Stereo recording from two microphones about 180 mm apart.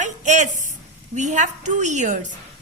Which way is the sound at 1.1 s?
40° right (ahead or behind).